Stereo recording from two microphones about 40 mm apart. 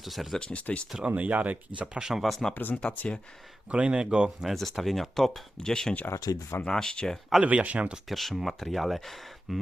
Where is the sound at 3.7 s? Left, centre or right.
Right.